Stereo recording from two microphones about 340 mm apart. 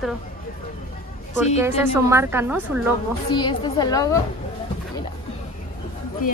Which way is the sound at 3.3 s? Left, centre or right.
Centre.